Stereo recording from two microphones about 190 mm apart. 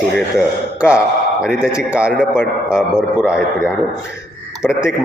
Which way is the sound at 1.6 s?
5° right (ahead or behind).